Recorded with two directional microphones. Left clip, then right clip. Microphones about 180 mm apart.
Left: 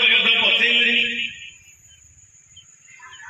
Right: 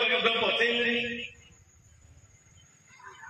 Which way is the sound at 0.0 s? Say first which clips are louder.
Left 10 dB; 40° right (ahead or behind).